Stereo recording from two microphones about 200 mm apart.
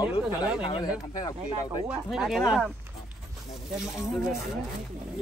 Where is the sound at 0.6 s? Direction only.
25° left (ahead or behind).